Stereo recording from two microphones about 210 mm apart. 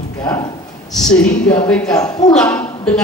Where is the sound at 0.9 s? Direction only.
Centre (ahead or behind).